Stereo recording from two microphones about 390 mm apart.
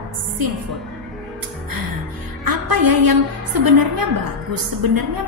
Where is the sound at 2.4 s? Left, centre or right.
Right.